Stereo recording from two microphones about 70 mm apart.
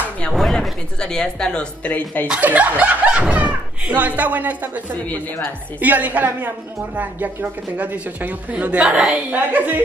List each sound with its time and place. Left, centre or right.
0.2 s speech: centre
1.9 s a woman's voice: left
2.4 s speech: right
7.7 s speech: right